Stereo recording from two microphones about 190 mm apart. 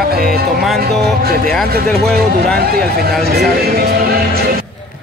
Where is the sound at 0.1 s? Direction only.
55° right (ahead or behind).